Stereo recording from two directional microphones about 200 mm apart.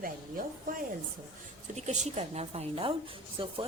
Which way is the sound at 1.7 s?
35° right (ahead or behind).